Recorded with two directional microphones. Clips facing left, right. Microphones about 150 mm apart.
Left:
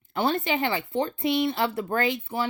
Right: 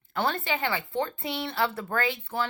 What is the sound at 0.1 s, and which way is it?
A woman's voice, 20° left (ahead or behind).